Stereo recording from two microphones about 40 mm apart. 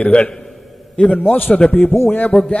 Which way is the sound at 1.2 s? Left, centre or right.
Left.